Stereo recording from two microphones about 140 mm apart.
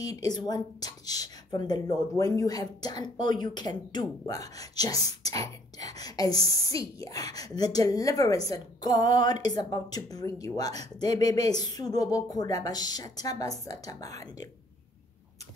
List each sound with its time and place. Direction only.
0.0 s a woman's voice: 25° left (ahead or behind)